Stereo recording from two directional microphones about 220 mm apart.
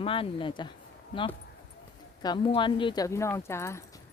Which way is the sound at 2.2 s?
20° left (ahead or behind).